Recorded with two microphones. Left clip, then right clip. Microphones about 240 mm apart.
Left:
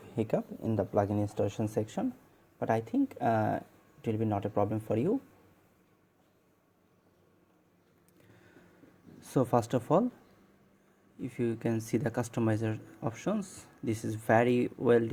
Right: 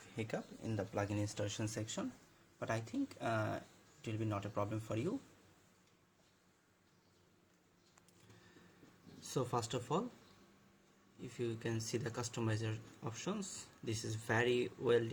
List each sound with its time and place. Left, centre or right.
0.3 s speech: centre
9.2 s speech: left
11.2 s speech: left